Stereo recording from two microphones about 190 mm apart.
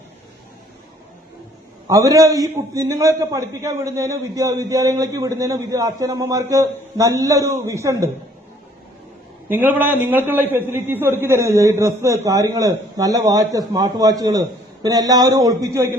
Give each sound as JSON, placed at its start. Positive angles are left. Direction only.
{"t": 1.9, "sound": "a man's voice", "side_deg": -15}
{"t": 9.5, "sound": "a man's voice", "side_deg": -10}